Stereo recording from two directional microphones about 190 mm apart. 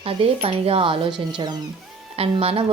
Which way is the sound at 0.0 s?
30° right (ahead or behind).